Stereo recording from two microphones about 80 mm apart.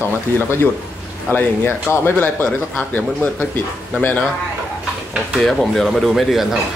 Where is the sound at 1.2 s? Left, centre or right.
Left.